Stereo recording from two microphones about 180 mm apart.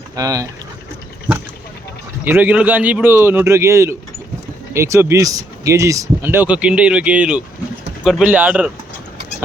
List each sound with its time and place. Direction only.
0.2 s speech: 20° right (ahead or behind)
2.2 s speech: 10° right (ahead or behind)